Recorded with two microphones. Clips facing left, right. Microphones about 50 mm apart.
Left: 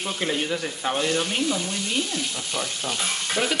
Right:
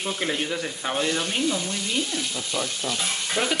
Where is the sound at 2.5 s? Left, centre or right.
Left.